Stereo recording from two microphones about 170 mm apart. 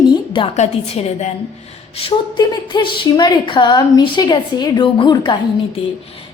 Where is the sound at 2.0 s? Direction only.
30° left (ahead or behind).